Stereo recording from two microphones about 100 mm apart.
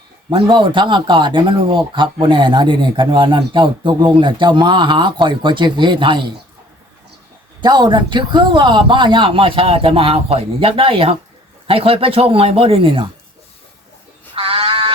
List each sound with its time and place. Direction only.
0.3 s speech: 55° right (ahead or behind)
7.6 s a man's voice: 50° right (ahead or behind)
14.3 s a sound: 70° right (ahead or behind)